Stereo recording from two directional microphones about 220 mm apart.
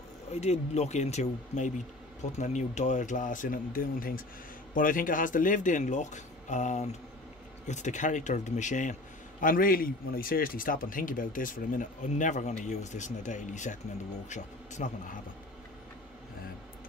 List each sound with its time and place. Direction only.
0.3 s a man's voice: 30° left (ahead or behind)